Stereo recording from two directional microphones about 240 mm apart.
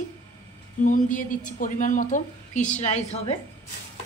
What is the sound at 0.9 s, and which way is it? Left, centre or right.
A woman's voice, left.